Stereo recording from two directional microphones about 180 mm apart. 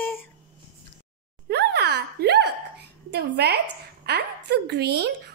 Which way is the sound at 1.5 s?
65° right (ahead or behind).